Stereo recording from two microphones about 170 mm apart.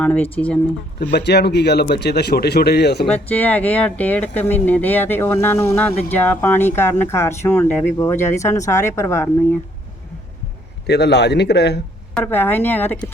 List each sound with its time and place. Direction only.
0.0 s speech: 10° left (ahead or behind)
1.1 s speech: 75° left (ahead or behind)
3.1 s speech: 10° left (ahead or behind)
10.8 s a man's voice: 85° left
12.1 s speech: 10° left (ahead or behind)